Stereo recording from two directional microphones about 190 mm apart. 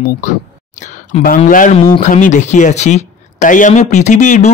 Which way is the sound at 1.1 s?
40° left (ahead or behind).